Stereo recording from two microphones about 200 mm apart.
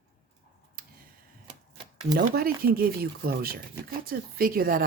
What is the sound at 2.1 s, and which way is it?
A woman's voice, 50° right (ahead or behind).